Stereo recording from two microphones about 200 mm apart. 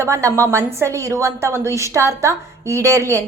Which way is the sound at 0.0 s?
15° right (ahead or behind).